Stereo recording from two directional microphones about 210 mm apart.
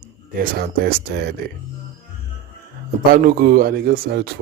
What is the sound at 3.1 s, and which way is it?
A man's voice, 45° right (ahead or behind).